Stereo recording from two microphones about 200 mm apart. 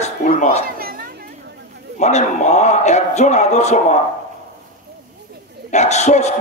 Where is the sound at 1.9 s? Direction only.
35° left (ahead or behind).